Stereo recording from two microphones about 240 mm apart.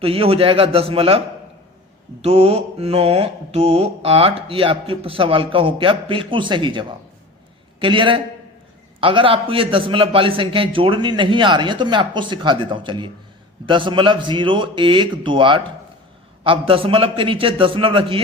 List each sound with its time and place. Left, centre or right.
0.0 s mantra: right
2.2 s mantra: right